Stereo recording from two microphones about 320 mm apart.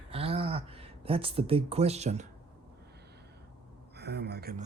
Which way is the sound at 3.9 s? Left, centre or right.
Right.